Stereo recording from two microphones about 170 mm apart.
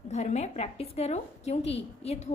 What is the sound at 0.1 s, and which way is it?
A woman's voice, 40° left (ahead or behind).